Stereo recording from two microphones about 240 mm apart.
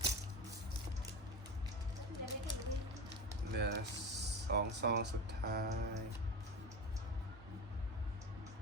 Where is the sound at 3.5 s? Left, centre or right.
Right.